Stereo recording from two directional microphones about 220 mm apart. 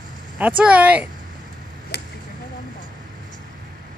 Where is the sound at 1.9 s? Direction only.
45° left (ahead or behind).